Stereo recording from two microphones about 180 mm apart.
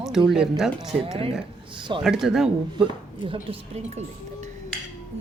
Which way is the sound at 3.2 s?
30° right (ahead or behind).